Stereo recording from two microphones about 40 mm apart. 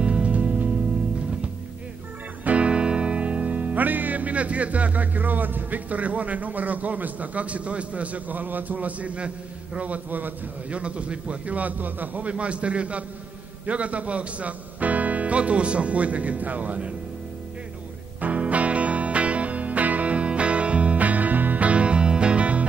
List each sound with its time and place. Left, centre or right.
0.0 s music: right
2.4 s music: right
9.8 s a man's voice: right
10.7 s speech: right
18.2 s music: right